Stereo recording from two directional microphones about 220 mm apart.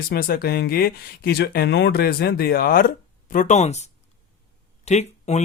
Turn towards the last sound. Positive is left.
turn(degrees=30)  # may be behind; listen again after turning